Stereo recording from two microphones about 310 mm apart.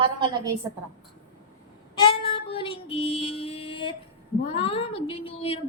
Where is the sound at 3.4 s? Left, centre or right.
Centre.